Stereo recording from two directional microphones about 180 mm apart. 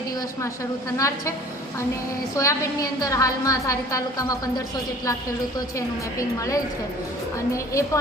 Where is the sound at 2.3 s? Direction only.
15° left (ahead or behind).